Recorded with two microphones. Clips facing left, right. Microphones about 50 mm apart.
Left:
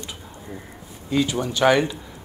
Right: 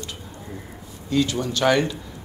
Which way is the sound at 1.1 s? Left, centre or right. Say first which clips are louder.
Even; centre.